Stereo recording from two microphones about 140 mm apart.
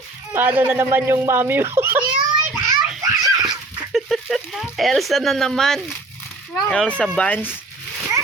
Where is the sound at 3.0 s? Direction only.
25° right (ahead or behind).